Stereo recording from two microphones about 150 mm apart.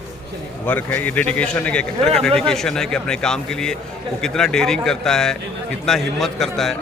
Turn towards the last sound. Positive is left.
turn(degrees=0)  # may be behind; listen again after turning